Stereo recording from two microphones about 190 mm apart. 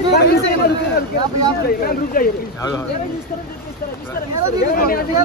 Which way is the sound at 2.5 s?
20° left (ahead or behind).